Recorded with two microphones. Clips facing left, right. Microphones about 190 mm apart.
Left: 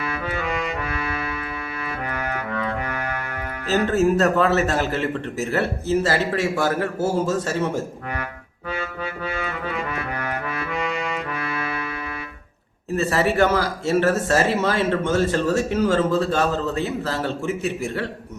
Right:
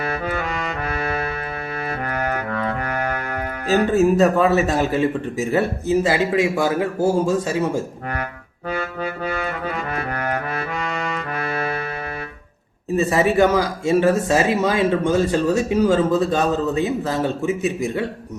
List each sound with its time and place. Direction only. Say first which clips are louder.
0.9 s music: right 4 dB; 45° right (ahead or behind)
3.8 s a man's voice: right 2 dB; 15° right (ahead or behind)
8.8 s music: right 2 dB; 40° right (ahead or behind)
9.6 s brass instrument: right 2 dB; 45° right (ahead or behind)
12.9 s a man's voice: right 3 dB; 15° right (ahead or behind)